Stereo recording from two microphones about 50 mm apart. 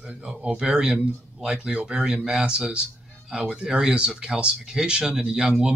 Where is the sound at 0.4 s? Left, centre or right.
Centre.